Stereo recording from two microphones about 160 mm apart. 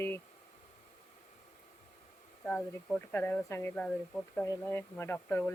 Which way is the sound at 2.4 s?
5° left (ahead or behind).